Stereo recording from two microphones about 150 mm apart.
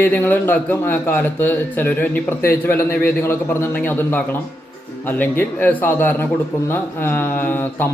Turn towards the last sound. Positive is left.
turn(degrees=15)  # may be behind; listen again after turning